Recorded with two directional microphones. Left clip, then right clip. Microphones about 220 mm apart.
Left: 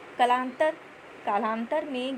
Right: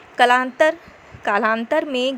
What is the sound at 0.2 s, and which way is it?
A woman's voice, 25° right (ahead or behind).